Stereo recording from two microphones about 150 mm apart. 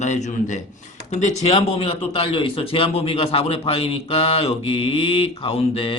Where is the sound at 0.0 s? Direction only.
50° left (ahead or behind).